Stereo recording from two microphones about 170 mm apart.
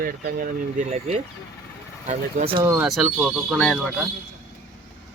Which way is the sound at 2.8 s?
Centre (ahead or behind).